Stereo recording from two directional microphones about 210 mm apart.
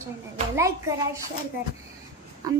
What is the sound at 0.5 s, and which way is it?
Speech, 15° right (ahead or behind).